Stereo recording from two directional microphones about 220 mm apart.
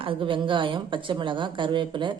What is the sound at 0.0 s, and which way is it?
A woman's voice, 25° right (ahead or behind).